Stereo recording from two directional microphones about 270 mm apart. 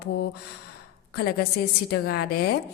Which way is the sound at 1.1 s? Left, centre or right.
Left.